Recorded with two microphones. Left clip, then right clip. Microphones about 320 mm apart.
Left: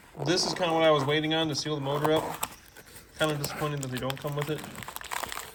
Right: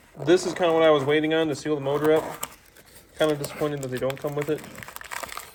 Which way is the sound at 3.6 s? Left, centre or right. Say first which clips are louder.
Right 6 dB; right.